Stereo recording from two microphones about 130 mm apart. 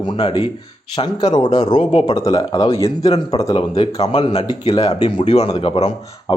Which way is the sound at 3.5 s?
50° left (ahead or behind).